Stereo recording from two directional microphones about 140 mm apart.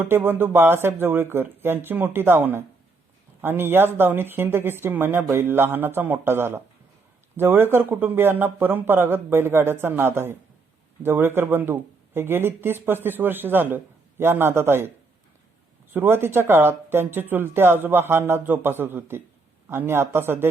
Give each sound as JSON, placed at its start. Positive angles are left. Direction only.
{"t": 0.0, "sound": "speech", "side_deg": -15}
{"t": 15.9, "sound": "speech", "side_deg": -15}